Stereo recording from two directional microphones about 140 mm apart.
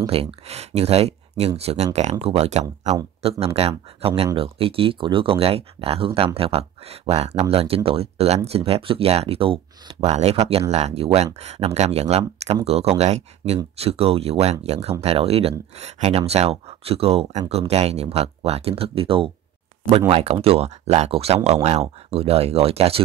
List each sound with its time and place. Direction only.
0.0 s speech: 45° right (ahead or behind)
10.1 s speech: 50° right (ahead or behind)